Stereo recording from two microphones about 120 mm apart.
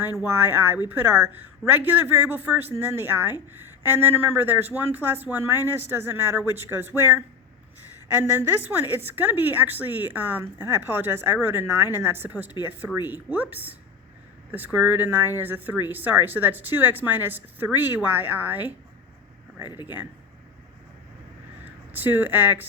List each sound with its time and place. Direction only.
0.0 s a woman's voice: 20° right (ahead or behind)
19.6 s speech: 35° left (ahead or behind)
21.6 s speech: 15° right (ahead or behind)